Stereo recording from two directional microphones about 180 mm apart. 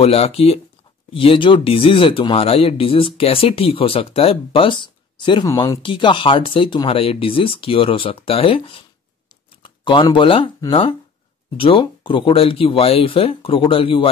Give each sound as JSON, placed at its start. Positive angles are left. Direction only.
{"t": 0.0, "sound": "speech", "side_deg": 35}